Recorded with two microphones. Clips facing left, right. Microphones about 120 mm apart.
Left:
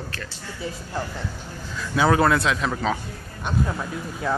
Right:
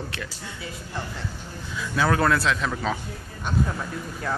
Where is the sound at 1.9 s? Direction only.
10° left (ahead or behind).